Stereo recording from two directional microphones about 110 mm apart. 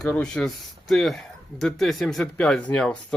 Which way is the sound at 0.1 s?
10° left (ahead or behind).